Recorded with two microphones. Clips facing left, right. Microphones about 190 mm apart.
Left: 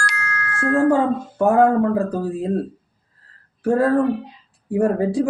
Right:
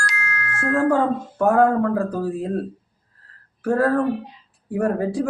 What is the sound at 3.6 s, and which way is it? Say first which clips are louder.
Speech: left 2 dB; 20° left (ahead or behind).